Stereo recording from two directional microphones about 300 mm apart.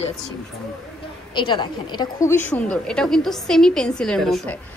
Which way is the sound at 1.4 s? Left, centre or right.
Centre.